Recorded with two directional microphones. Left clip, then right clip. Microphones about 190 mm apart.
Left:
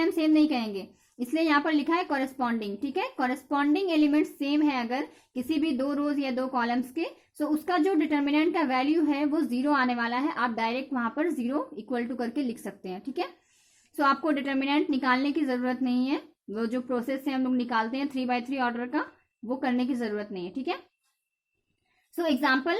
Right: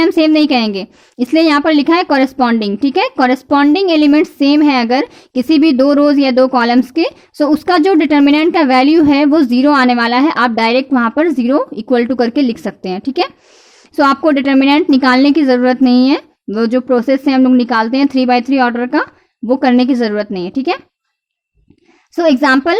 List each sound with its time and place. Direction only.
0.0 s a woman's voice: 45° right (ahead or behind)
22.1 s a woman's voice: 45° right (ahead or behind)